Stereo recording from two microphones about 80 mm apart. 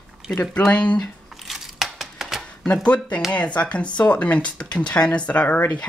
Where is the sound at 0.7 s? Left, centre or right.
Centre.